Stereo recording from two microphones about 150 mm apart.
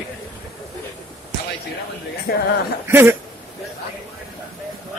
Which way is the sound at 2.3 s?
90° left.